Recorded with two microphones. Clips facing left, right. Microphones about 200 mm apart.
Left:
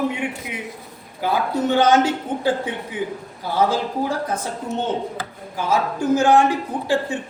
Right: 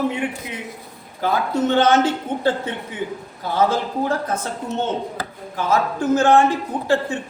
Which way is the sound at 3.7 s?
10° left (ahead or behind).